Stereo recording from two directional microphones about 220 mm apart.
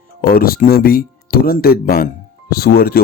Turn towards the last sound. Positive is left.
turn(degrees=45)  # may be behind; listen again after turning